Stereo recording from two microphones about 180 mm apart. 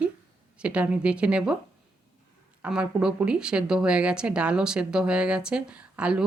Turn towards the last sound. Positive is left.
turn(degrees=-5)  # may be behind; listen again after turning